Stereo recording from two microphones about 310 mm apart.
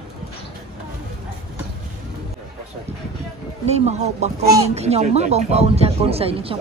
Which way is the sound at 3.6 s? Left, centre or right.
Right.